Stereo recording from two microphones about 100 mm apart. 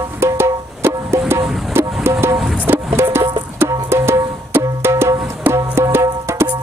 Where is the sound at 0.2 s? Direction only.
25° right (ahead or behind).